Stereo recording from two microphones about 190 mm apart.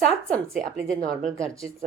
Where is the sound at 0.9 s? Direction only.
45° right (ahead or behind).